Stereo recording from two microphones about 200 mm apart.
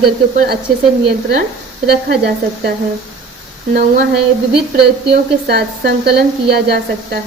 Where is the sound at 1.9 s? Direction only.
55° right (ahead or behind).